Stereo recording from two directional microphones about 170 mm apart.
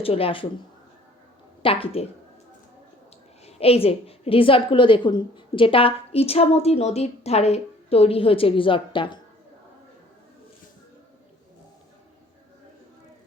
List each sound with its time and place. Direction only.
0.0 s a woman's voice: 35° left (ahead or behind)
1.6 s a woman's voice: 35° left (ahead or behind)
3.4 s a woman's voice: 35° left (ahead or behind)